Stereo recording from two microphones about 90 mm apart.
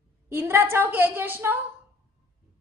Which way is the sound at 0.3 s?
25° right (ahead or behind).